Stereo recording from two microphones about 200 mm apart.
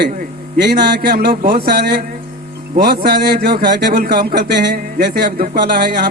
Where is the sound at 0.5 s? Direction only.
55° right (ahead or behind).